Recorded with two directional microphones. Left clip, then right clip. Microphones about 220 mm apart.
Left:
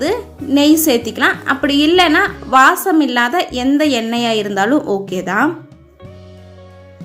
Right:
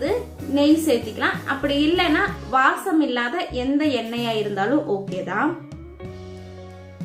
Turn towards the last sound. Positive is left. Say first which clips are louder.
# left 8 dB
turn(degrees=50)  # may be behind; listen again after turning